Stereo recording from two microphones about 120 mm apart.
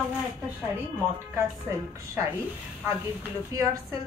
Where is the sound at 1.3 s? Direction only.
20° right (ahead or behind).